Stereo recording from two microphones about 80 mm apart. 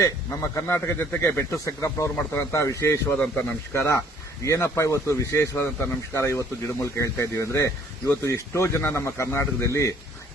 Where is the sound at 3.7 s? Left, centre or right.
Left.